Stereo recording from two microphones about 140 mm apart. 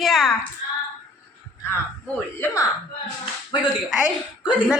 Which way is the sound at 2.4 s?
20° left (ahead or behind).